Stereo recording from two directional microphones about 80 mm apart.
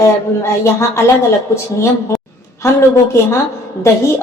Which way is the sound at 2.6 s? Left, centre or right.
Left.